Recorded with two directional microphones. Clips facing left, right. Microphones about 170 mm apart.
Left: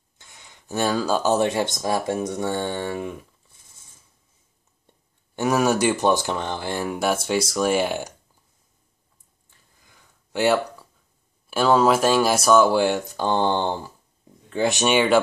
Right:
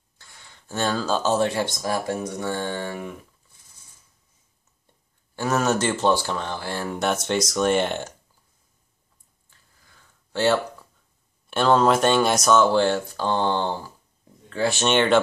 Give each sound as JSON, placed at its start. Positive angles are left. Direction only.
{"t": 0.2, "sound": "speech", "side_deg": 20}
{"t": 5.3, "sound": "speech", "side_deg": 15}
{"t": 9.8, "sound": "a sound", "side_deg": 15}
{"t": 11.5, "sound": "speech", "side_deg": 5}